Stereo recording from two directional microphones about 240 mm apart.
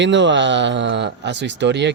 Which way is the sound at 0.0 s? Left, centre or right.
Right.